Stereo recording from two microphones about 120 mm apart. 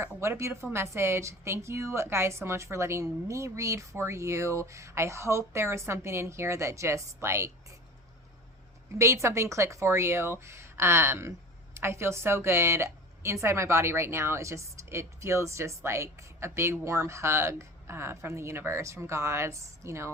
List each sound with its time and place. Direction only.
0.0 s speech: 25° right (ahead or behind)
9.0 s speech: 25° right (ahead or behind)